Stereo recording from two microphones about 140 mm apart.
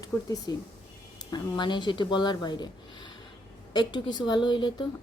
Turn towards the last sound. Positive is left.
turn(degrees=35)  # may be behind; listen again after turning